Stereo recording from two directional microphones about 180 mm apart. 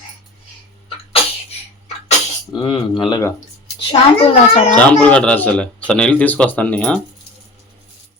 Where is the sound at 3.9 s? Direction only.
35° left (ahead or behind).